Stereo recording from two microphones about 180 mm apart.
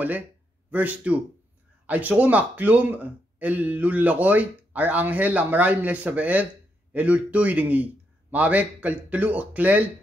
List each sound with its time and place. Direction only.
0.7 s speech: 10° right (ahead or behind)